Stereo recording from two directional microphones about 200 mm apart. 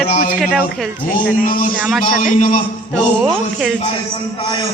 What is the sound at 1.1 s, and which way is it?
Speech, 45° left (ahead or behind).